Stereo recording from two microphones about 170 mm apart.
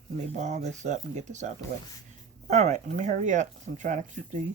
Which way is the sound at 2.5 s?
45° right (ahead or behind).